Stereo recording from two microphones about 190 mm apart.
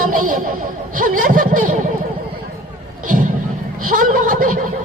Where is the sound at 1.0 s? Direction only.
45° right (ahead or behind).